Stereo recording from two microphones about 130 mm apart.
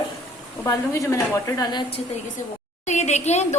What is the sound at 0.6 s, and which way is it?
A woman's voice, 20° left (ahead or behind).